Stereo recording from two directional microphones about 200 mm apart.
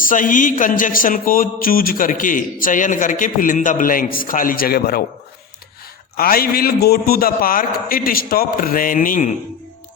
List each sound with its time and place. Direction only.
0.0 s speech: 40° left (ahead or behind)
6.1 s speech: 45° left (ahead or behind)